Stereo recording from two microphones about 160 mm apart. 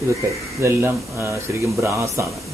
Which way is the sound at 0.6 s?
15° right (ahead or behind).